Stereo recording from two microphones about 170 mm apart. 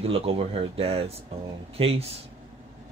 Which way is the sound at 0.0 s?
35° right (ahead or behind).